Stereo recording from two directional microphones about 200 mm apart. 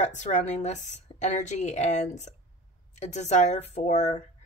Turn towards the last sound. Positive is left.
turn(degrees=35)  # may be behind; listen again after turning